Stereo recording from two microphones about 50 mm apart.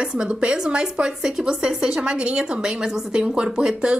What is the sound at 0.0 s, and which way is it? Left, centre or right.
A woman's voice, centre.